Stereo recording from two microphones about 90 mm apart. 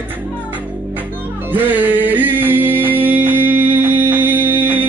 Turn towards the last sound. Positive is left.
turn(degrees=-20)  # may be behind; listen again after turning